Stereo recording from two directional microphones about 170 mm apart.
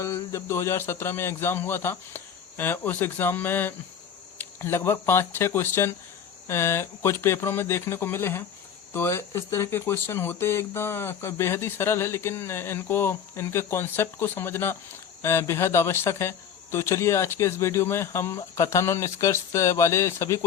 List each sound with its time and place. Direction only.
0.0 s speech: 15° left (ahead or behind)